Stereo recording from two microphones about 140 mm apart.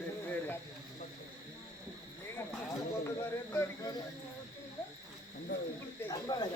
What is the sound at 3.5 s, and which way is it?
Speech, 20° left (ahead or behind).